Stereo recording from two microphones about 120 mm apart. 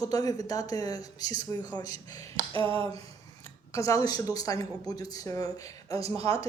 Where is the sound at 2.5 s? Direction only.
45° right (ahead or behind).